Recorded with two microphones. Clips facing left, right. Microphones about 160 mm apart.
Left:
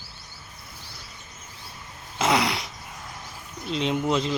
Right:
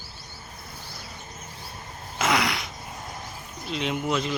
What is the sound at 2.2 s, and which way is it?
Throat clearing, 30° left (ahead or behind).